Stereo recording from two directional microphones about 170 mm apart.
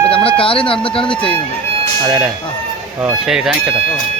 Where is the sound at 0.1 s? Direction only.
35° left (ahead or behind).